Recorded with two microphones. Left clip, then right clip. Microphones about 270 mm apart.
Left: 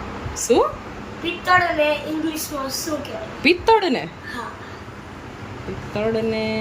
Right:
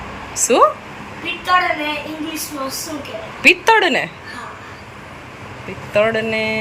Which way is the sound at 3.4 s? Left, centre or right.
Centre.